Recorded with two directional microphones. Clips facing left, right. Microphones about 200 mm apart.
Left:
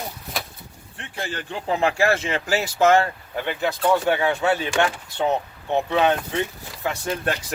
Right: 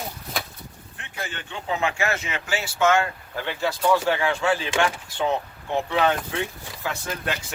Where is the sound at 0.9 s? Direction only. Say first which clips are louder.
Left 4 dB; 35° left (ahead or behind).